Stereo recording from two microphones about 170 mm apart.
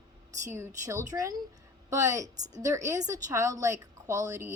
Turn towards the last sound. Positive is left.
turn(degrees=-20)  # may be behind; listen again after turning